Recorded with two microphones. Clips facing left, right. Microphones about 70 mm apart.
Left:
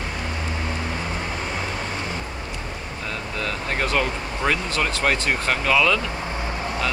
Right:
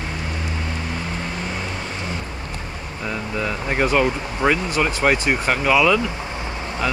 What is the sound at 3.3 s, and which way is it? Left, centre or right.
Speech, centre.